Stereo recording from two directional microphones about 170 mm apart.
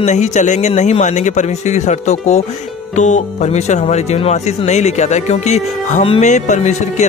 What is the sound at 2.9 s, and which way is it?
Speech, 45° left (ahead or behind).